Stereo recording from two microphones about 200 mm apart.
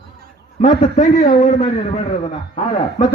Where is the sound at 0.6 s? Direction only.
40° left (ahead or behind).